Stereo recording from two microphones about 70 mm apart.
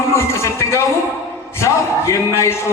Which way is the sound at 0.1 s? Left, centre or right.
Left.